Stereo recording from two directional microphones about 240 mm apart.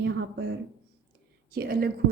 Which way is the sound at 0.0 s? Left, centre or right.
Right.